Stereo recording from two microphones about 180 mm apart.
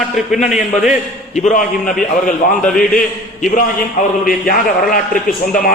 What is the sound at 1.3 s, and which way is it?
A man's voice, 45° left (ahead or behind).